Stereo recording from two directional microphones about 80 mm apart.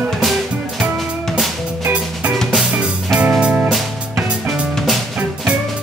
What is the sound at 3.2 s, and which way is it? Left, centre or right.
Music, centre.